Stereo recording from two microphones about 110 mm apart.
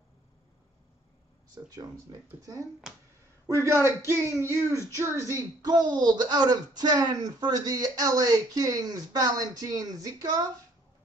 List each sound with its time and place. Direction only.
1.6 s speech: 35° right (ahead or behind)
3.4 s speech: 30° right (ahead or behind)